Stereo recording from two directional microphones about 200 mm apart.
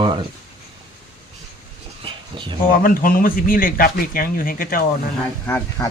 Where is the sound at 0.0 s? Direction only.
25° right (ahead or behind).